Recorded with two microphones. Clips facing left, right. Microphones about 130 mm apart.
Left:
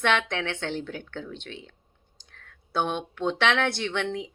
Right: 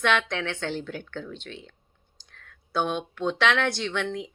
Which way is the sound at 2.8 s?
20° left (ahead or behind).